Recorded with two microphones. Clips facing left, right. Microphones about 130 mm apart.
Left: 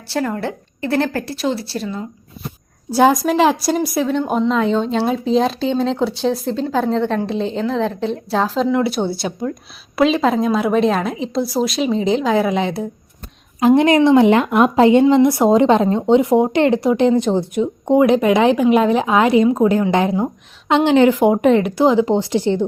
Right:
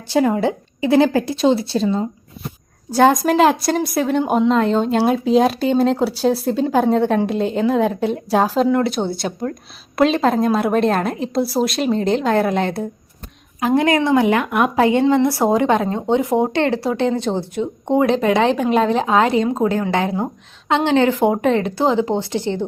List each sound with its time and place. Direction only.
0.1 s a woman's voice: 20° right (ahead or behind)
2.9 s a woman's voice: 5° left (ahead or behind)
13.6 s a woman's voice: 20° left (ahead or behind)